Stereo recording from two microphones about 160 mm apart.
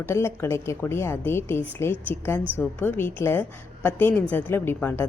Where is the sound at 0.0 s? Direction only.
15° left (ahead or behind).